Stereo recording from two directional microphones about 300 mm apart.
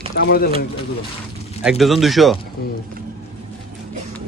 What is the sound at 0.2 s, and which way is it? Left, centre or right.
Speech, left.